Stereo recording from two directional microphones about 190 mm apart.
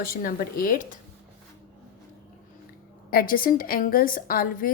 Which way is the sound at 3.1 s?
50° left (ahead or behind).